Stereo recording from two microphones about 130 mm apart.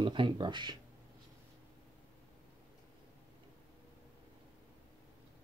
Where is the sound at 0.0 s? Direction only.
40° right (ahead or behind).